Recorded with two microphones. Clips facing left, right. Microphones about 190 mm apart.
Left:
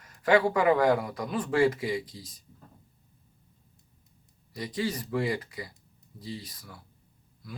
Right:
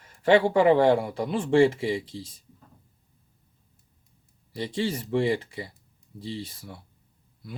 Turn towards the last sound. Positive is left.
turn(degrees=-25)  # may be behind; listen again after turning